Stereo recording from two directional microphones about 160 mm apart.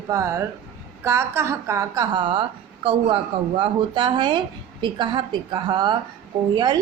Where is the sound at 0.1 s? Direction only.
15° right (ahead or behind).